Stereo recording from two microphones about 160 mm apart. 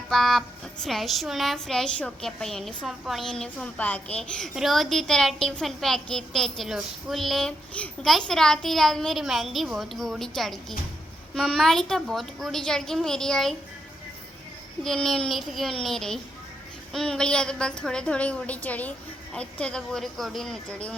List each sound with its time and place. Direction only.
0.1 s a woman's voice: centre (ahead or behind)
14.8 s a woman's voice: 5° left (ahead or behind)